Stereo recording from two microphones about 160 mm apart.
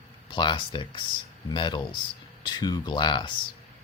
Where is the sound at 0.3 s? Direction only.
30° left (ahead or behind).